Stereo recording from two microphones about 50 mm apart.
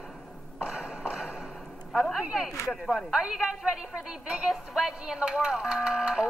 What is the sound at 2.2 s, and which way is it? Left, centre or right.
Speech, centre.